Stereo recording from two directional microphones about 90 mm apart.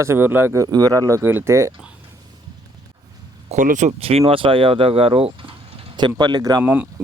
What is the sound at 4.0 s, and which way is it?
Speech, 90° right.